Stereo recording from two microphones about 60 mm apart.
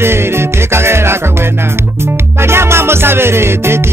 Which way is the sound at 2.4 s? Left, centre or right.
Right.